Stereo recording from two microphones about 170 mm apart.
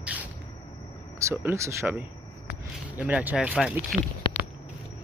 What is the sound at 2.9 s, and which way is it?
Speech, 10° right (ahead or behind).